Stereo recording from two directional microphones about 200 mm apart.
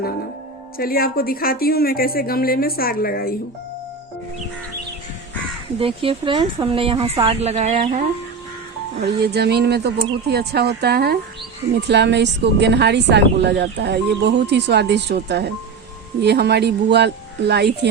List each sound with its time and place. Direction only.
0.8 s speech: 45° left (ahead or behind)
5.8 s speech: 25° right (ahead or behind)
9.0 s a woman's voice: 55° right (ahead or behind)